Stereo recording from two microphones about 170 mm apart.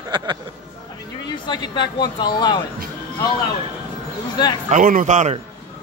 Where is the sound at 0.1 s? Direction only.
25° right (ahead or behind).